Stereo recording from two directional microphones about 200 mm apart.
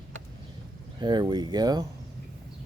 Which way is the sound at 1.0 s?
20° right (ahead or behind).